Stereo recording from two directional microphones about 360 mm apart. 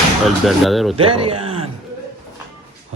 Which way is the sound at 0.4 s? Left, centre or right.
Centre.